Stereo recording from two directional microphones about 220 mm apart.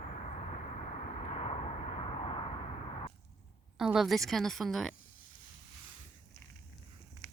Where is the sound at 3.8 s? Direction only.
Centre (ahead or behind).